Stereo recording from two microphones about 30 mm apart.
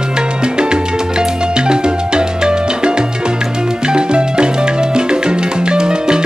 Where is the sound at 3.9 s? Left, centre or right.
Right.